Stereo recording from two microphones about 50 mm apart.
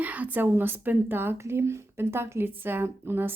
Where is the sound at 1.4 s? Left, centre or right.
Right.